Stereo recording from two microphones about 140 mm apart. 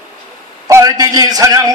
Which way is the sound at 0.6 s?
25° right (ahead or behind).